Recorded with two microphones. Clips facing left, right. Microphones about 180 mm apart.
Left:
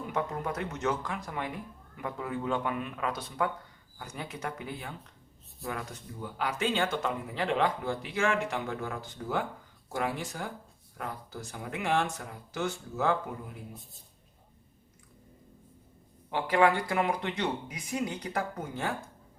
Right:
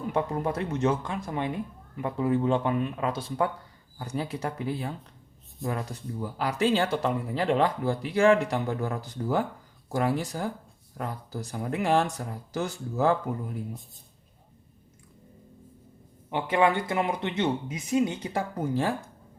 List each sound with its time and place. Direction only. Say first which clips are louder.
0.1 s a man's voice: right 5 dB; 30° right (ahead or behind)
16.3 s speech: right 1 dB; 20° right (ahead or behind)